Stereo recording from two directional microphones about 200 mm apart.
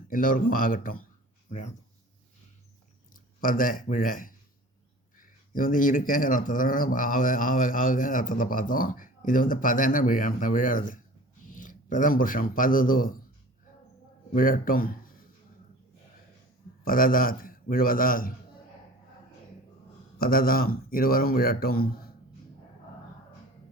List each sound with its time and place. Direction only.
0.1 s speech: 45° left (ahead or behind)
3.4 s speech: 45° left (ahead or behind)
14.3 s speech: 45° left (ahead or behind)
16.8 s speech: 45° left (ahead or behind)
20.1 s speech: 45° left (ahead or behind)